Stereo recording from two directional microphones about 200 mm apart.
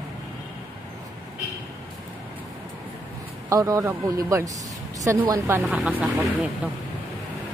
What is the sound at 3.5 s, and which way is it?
A woman's voice, 15° right (ahead or behind).